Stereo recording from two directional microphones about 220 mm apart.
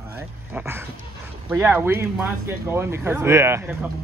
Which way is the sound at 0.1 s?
10° right (ahead or behind).